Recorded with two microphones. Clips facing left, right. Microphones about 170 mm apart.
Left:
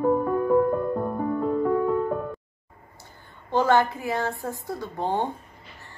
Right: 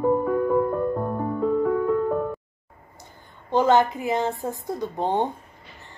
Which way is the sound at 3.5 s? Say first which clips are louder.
Right 2 dB; 20° right (ahead or behind).